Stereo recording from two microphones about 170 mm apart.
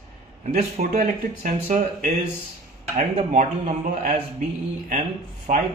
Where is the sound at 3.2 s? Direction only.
45° right (ahead or behind).